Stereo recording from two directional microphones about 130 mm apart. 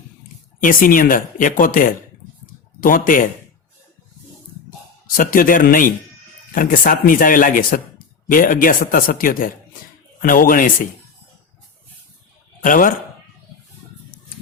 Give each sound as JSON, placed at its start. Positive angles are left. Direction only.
{"t": 0.6, "sound": "speech", "side_deg": 90}
{"t": 5.0, "sound": "speech", "side_deg": 90}
{"t": 12.6, "sound": "speech", "side_deg": 90}